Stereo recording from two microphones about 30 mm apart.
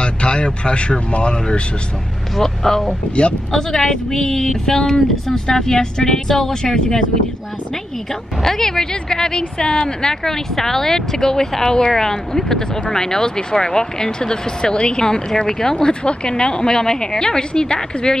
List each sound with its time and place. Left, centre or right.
0.0 s speech: left
2.3 s speech: centre
6.6 s speech: left
8.4 s speech: centre
15.8 s speech: left